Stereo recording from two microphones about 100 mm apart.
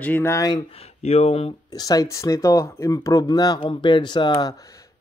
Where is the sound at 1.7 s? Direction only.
40° left (ahead or behind).